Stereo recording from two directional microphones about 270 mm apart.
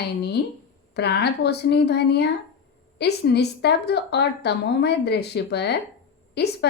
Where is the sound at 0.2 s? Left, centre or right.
Left.